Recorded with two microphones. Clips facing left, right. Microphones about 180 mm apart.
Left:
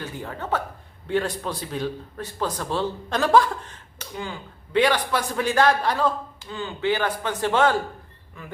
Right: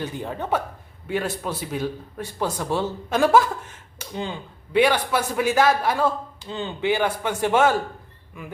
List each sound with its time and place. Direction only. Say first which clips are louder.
0.0 s a man's voice: right 4 dB; 20° right (ahead or behind)
4.1 s speech: right 3 dB; 20° right (ahead or behind)
4.7 s a man's voice: right 1 dB; 10° right (ahead or behind)
6.5 s speech: right 1 dB; 20° right (ahead or behind)
7.2 s a man's voice: right 2 dB; 10° right (ahead or behind)